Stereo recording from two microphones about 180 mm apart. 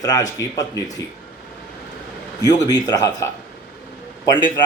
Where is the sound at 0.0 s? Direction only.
20° left (ahead or behind).